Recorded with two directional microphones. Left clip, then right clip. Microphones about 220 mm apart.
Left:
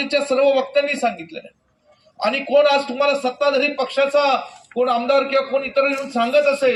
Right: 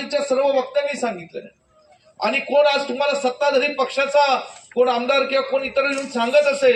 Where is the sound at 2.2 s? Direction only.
20° right (ahead or behind).